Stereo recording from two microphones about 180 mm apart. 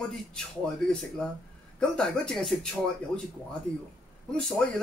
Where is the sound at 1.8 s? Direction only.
5° left (ahead or behind).